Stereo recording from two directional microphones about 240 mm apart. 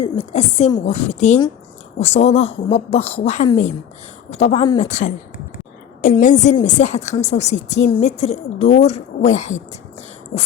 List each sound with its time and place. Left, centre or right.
0.0 s a woman's voice: left